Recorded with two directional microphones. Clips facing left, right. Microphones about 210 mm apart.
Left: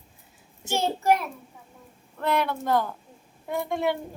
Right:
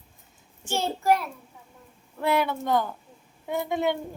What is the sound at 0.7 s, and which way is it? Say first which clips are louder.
Speech: left 1 dB; 20° left (ahead or behind).